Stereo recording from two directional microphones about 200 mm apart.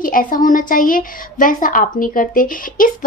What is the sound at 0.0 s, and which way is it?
A woman's voice, 45° left (ahead or behind).